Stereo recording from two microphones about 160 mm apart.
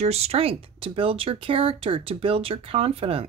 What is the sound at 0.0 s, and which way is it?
Speech, 40° right (ahead or behind).